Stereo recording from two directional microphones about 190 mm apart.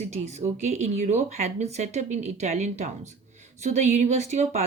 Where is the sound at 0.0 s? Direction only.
35° right (ahead or behind).